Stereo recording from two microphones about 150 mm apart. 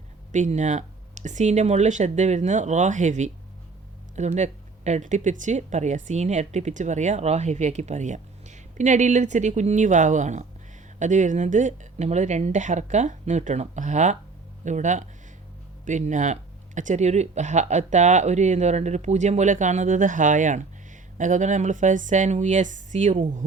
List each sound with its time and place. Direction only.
0.3 s speech: 55° right (ahead or behind)